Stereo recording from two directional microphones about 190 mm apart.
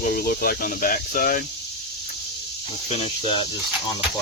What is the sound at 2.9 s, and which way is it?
Snake, 30° left (ahead or behind).